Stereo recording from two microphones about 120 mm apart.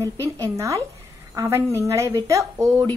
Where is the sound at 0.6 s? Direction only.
25° right (ahead or behind).